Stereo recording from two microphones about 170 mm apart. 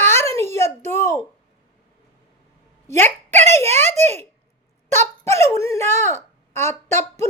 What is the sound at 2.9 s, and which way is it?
Speech, 15° left (ahead or behind).